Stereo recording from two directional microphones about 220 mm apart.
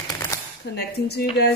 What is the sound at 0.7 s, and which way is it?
Speech, 50° left (ahead or behind).